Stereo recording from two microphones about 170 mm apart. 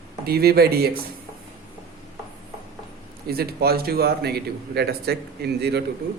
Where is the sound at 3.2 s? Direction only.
65° right (ahead or behind).